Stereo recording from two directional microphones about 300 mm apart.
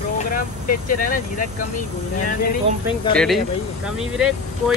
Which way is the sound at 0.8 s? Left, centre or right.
Left.